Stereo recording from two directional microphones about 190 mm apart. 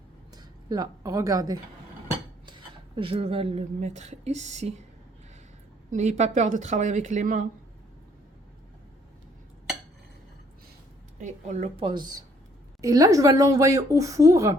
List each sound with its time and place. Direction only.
0.7 s a woman's voice: 20° right (ahead or behind); by 4.7 s 35° right (ahead or behind)
5.9 s speech: 40° right (ahead or behind)
11.2 s a woman's voice: 40° right (ahead or behind); by 14.5 s 15° right (ahead or behind)